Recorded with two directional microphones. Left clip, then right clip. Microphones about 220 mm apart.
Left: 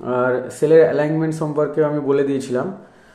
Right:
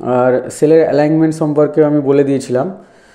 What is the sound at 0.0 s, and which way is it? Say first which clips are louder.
Speech: right 7 dB; 30° right (ahead or behind).